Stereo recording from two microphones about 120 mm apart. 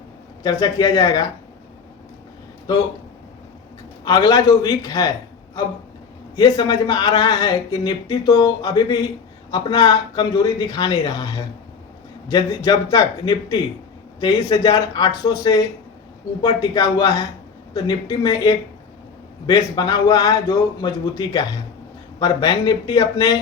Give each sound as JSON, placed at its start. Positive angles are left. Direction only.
{"t": 0.4, "sound": "speech", "side_deg": 30}
{"t": 4.0, "sound": "speech", "side_deg": 35}
{"t": 6.3, "sound": "speech", "side_deg": 30}